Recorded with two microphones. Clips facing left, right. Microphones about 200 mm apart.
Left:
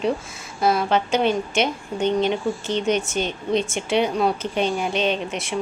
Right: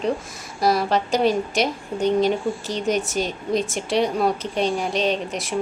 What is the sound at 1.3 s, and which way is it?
Speech, 35° right (ahead or behind).